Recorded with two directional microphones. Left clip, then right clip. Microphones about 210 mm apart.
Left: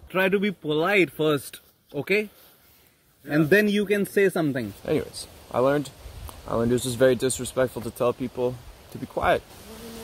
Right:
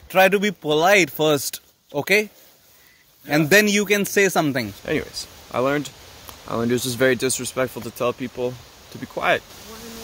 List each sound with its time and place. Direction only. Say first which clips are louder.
0.1 s speech: right 7 dB; 55° right (ahead or behind)
3.3 s a man's voice: right 4 dB; 45° right (ahead or behind)
4.8 s speech: right 2 dB; centre (ahead or behind)